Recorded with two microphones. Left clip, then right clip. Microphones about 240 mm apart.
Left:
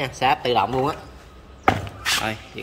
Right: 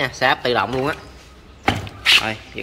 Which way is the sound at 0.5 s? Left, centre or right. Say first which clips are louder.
Even; right.